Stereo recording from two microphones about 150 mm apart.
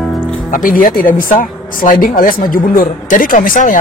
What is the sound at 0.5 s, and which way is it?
Speech, 65° left (ahead or behind).